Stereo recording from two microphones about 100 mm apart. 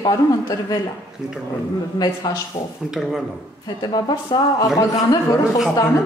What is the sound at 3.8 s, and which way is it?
Speech, 45° left (ahead or behind).